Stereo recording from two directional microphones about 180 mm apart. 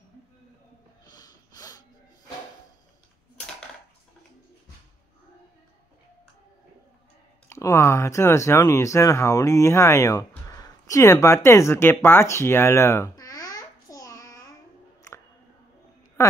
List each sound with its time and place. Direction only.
1.1 s snort: 20° left (ahead or behind)
7.4 s speech: 15° left (ahead or behind)